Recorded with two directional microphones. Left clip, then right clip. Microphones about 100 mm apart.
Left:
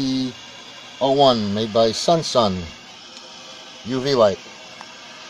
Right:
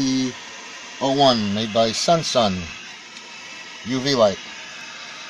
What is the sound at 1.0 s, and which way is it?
Speech, 10° left (ahead or behind).